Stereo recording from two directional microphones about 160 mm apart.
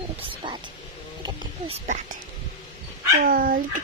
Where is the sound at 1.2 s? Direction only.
35° right (ahead or behind).